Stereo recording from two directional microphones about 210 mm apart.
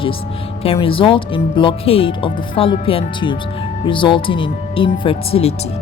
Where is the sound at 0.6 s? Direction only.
25° left (ahead or behind).